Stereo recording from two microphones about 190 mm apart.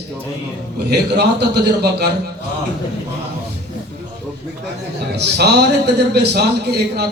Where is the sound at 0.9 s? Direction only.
60° right (ahead or behind).